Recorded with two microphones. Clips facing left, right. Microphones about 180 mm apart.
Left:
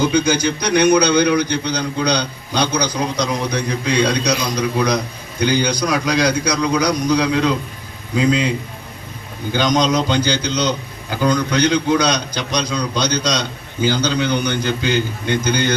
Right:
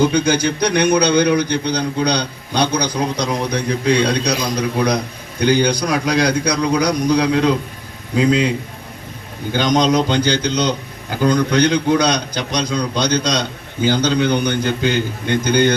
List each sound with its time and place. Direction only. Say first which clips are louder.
0.0 s a man's voice: right 1 dB; 60° right (ahead or behind)
9.5 s a man's voice: right 1 dB; 55° right (ahead or behind)